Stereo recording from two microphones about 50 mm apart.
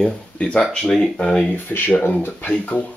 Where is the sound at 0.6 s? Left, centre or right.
Centre.